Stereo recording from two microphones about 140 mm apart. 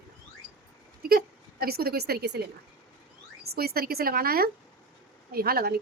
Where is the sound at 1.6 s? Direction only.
90° right.